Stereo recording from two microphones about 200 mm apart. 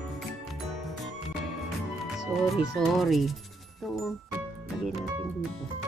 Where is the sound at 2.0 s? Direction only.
Centre (ahead or behind).